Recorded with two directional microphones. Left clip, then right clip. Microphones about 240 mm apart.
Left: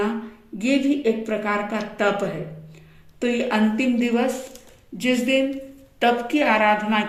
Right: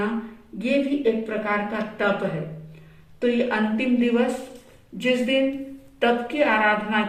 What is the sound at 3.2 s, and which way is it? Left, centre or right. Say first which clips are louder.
A woman's voice: even; left.